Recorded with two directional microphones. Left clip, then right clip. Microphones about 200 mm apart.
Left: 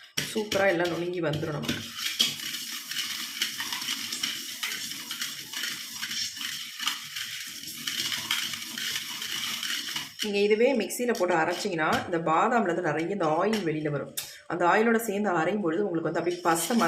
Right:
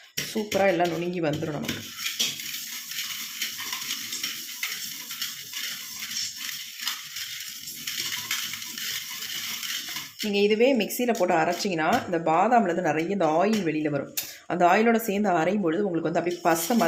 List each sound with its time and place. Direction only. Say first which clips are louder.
0.6 s speech: right 3 dB; 30° right (ahead or behind)
10.3 s speech: right 2 dB; 25° right (ahead or behind)